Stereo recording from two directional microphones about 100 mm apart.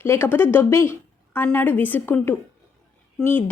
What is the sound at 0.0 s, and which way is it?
A woman's voice, 25° left (ahead or behind).